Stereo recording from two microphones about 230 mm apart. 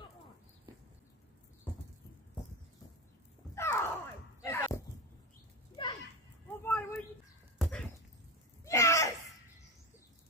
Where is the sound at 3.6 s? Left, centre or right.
Centre.